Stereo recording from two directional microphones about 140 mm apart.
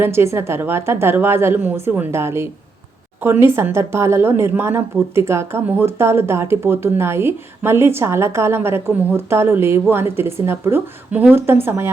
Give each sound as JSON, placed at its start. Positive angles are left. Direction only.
{"t": 0.0, "sound": "a woman's voice", "side_deg": -20}